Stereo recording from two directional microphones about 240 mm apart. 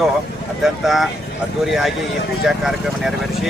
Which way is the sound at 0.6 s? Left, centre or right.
Centre.